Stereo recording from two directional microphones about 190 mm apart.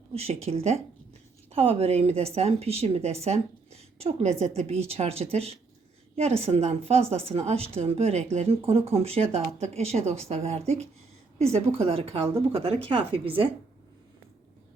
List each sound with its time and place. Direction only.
0.1 s a woman's voice: 35° right (ahead or behind)